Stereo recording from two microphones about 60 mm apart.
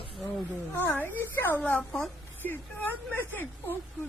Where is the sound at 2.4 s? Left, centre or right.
Left.